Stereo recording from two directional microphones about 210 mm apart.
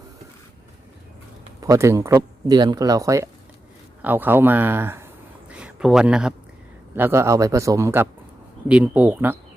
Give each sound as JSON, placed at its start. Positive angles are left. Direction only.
{"t": 1.6, "sound": "speech", "side_deg": -15}
{"t": 5.5, "sound": "a sound", "side_deg": -5}
{"t": 6.9, "sound": "speech", "side_deg": -10}